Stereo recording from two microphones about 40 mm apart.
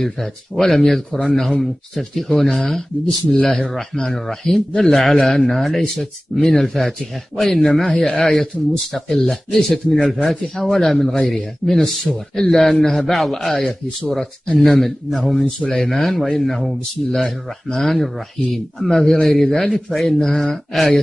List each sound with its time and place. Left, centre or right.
0.0 s speech: centre
6.3 s speech: centre
14.7 s speech: centre
15.3 s speech: left
15.7 s speech: centre